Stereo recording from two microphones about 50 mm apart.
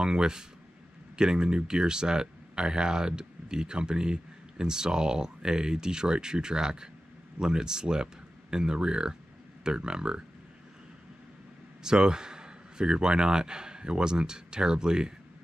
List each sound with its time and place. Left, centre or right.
0.0 s speech: centre
11.8 s speech: centre